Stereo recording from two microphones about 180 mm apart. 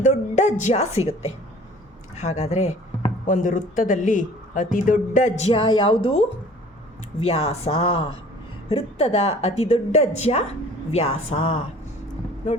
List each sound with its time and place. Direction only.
0.0 s a woman's voice: 45° left (ahead or behind)
2.1 s speech: 40° left (ahead or behind)